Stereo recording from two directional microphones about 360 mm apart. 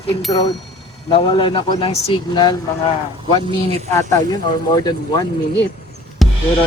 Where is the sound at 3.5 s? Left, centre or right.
Centre.